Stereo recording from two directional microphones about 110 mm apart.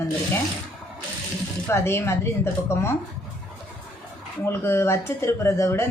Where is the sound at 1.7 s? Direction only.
25° left (ahead or behind).